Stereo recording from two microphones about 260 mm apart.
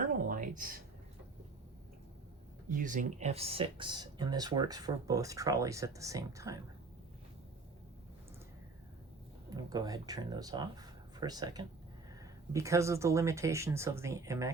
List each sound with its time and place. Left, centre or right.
0.0 s a sound: right
2.6 s speech: right; by 6.6 s centre
9.5 s speech: centre